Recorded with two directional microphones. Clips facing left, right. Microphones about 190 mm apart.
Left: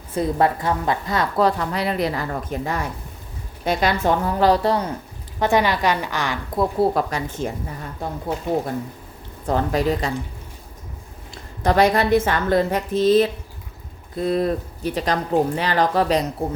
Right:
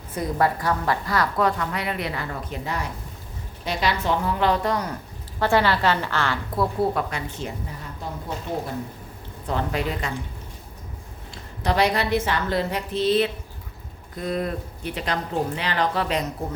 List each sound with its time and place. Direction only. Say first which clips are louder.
0.1 s a woman's voice: left 4 dB; 25° left (ahead or behind)
5.4 s a woman's voice: left 2 dB; 15° left (ahead or behind)
6.7 s a woman's voice: left 4 dB; 40° left (ahead or behind)
9.5 s a woman's voice: left 6 dB; 40° left (ahead or behind)
11.6 s a woman's voice: left 5 dB; 45° left (ahead or behind)
14.2 s a woman's voice: left 6 dB; 30° left (ahead or behind)